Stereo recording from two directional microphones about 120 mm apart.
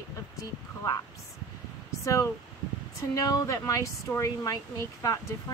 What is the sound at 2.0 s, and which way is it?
Speech, 25° left (ahead or behind).